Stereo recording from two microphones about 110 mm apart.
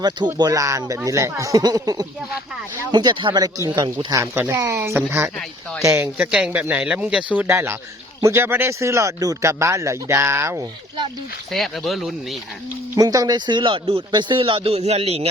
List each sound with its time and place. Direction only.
0.3 s speech: 35° right (ahead or behind)
2.9 s speech: 45° right (ahead or behind)
4.1 s speech: 25° right (ahead or behind)
6.1 s speech: 10° right (ahead or behind); by 10.7 s 25° right (ahead or behind)
11.5 s speech: centre (ahead or behind)
13.0 s a man's voice: 35° right (ahead or behind); by 15.3 s 65° right (ahead or behind)